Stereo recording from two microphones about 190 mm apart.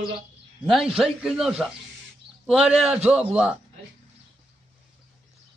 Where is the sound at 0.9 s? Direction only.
Centre (ahead or behind).